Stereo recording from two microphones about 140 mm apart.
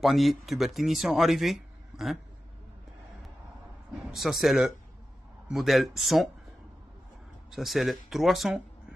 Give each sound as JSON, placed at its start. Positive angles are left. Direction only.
{"t": 0.0, "sound": "speech", "side_deg": 0}
{"t": 4.1, "sound": "speech", "side_deg": 0}
{"t": 7.5, "sound": "speech", "side_deg": 0}